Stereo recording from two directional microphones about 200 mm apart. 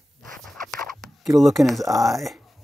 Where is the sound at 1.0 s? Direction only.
Centre (ahead or behind).